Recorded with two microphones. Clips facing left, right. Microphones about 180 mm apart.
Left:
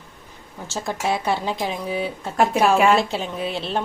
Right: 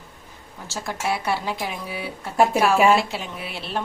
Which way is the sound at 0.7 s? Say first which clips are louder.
Left 3 dB; 20° left (ahead or behind).